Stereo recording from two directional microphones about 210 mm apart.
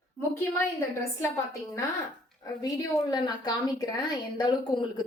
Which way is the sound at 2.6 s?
20° left (ahead or behind).